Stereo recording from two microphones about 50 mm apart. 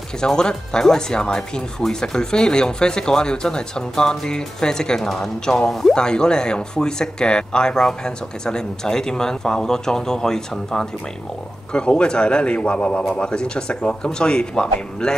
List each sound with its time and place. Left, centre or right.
0.2 s speech: centre